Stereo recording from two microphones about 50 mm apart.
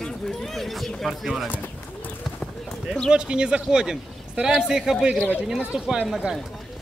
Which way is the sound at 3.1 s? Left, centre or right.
Centre.